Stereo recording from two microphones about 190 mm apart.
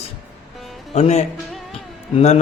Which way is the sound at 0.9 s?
35° left (ahead or behind).